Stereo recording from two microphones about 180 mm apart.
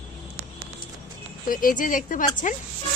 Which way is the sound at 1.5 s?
50° left (ahead or behind).